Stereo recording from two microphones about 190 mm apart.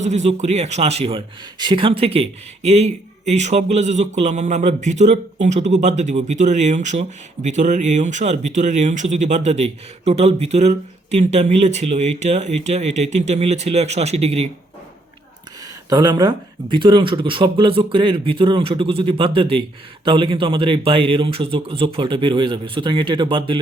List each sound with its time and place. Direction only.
0.0 s speech: 35° right (ahead or behind)
15.9 s speech: 20° right (ahead or behind)